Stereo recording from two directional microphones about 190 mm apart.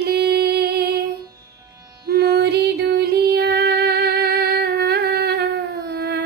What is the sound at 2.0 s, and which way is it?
Music, 55° right (ahead or behind).